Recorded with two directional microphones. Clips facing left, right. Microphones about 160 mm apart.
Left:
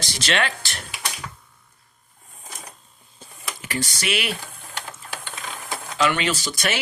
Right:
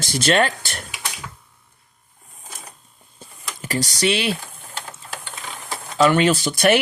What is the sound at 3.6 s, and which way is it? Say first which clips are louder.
Speech: right 6 dB; 40° right (ahead or behind).